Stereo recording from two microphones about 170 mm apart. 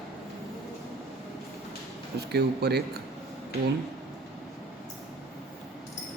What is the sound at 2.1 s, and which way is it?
Speech, 75° right (ahead or behind).